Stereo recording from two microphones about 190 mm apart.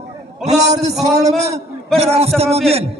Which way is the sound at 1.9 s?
30° right (ahead or behind).